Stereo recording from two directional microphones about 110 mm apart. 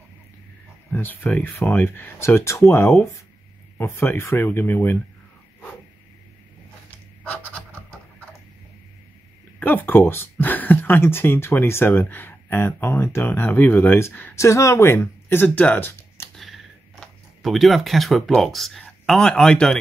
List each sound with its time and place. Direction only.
0.9 s speech: 15° left (ahead or behind)
6.9 s a sound: 10° left (ahead or behind)
9.6 s speech: 15° left (ahead or behind)
16.3 s speech: centre (ahead or behind)